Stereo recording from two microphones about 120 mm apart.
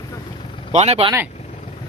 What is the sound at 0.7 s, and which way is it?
Speech, 65° right (ahead or behind).